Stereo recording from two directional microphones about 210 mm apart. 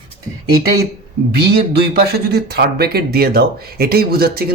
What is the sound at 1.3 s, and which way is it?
Speech, 50° right (ahead or behind).